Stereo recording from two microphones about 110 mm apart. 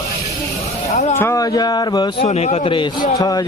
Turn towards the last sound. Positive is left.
turn(degrees=35)  # may be behind; listen again after turning